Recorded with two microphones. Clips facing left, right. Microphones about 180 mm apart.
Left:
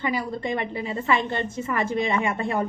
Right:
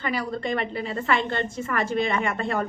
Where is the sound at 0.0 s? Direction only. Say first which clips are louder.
Left 1 dB; 15° left (ahead or behind).